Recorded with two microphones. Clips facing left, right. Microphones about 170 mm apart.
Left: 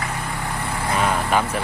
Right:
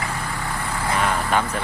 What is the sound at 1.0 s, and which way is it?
Vehicle, 15° left (ahead or behind).